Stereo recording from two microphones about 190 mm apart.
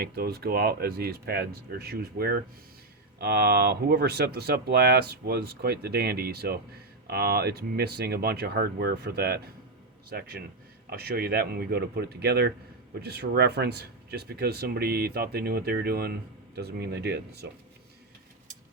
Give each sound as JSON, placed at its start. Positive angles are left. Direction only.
{"t": 0.0, "sound": "speech", "side_deg": -55}